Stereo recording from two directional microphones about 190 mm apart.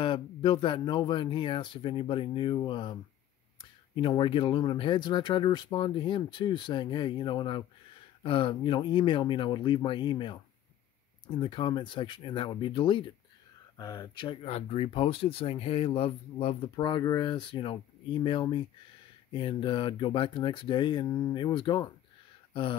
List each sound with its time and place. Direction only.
0.0 s speech: 30° left (ahead or behind)